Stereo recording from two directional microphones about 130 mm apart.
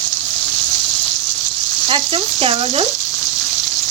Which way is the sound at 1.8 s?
40° right (ahead or behind).